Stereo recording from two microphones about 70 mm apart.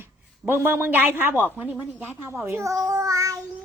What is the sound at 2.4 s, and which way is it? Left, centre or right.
Child singing, right.